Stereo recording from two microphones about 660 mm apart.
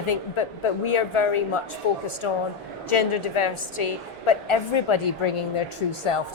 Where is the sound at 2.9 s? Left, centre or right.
Left.